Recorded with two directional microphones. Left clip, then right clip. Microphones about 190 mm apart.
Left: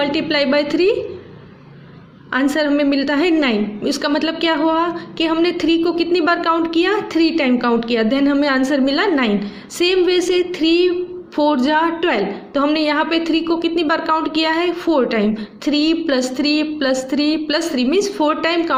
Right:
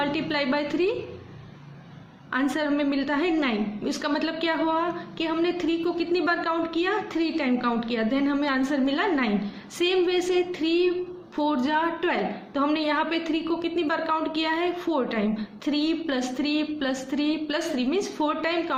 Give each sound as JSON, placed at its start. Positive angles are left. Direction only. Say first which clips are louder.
{"t": 0.0, "sound": "a woman's voice", "louder": "left 9 dB", "side_deg": 25}
{"t": 2.3, "sound": "a woman's voice", "louder": "left 9 dB", "side_deg": 25}